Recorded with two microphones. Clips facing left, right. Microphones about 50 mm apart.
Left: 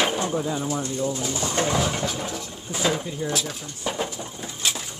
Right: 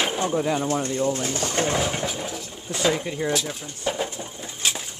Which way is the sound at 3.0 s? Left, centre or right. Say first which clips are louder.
Right 2 dB; right.